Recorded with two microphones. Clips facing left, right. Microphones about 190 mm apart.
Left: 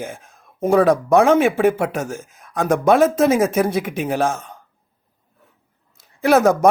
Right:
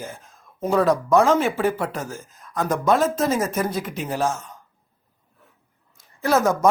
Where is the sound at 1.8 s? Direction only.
75° left (ahead or behind).